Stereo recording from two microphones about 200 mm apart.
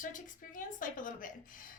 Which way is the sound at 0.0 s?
40° left (ahead or behind).